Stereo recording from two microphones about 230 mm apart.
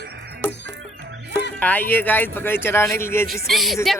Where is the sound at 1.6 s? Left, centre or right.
Centre.